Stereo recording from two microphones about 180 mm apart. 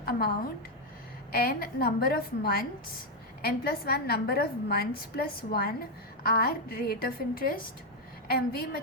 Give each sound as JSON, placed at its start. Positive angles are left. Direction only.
{"t": 0.0, "sound": "a woman's voice", "side_deg": 55}